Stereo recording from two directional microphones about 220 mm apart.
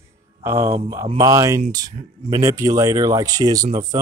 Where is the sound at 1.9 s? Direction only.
25° right (ahead or behind).